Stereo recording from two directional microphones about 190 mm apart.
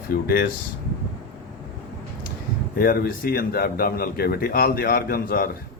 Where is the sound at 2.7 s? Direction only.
50° left (ahead or behind).